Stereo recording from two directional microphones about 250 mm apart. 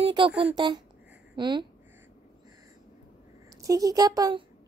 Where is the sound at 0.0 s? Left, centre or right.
Centre.